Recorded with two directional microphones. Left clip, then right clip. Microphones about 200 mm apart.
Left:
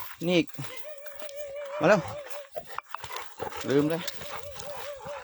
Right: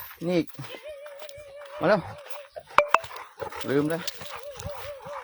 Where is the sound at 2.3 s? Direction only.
50° right (ahead or behind).